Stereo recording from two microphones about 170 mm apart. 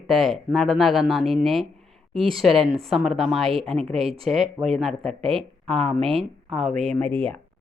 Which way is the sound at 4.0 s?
35° right (ahead or behind).